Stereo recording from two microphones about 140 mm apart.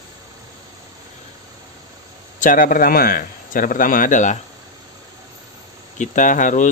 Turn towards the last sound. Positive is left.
turn(degrees=65)  # may be behind; listen again after turning